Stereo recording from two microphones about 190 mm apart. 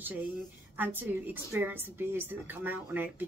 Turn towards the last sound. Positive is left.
turn(degrees=-10)  # may be behind; listen again after turning